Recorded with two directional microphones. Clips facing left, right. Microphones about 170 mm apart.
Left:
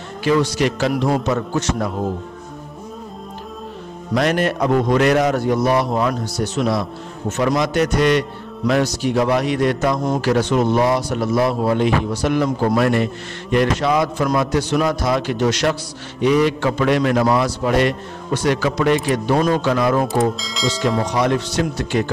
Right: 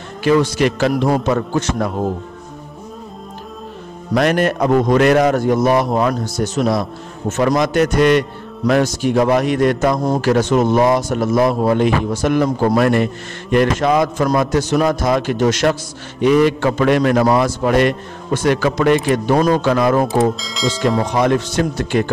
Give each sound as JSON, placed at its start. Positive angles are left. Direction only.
{"t": 0.2, "sound": "a man's voice", "side_deg": -50}
{"t": 4.1, "sound": "a man's voice", "side_deg": -55}
{"t": 20.3, "sound": "speech", "side_deg": 0}
{"t": 21.0, "sound": "a man's voice", "side_deg": -55}